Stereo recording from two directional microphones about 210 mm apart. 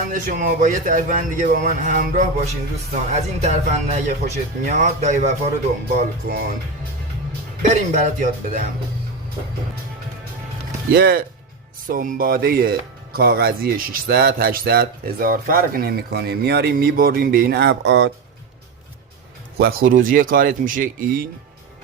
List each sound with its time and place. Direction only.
0.1 s speech: 40° right (ahead or behind)
6.0 s speech: 45° right (ahead or behind)
7.6 s speech: 35° right (ahead or behind)
10.9 s speech: 45° right (ahead or behind)
19.5 s speech: 45° right (ahead or behind)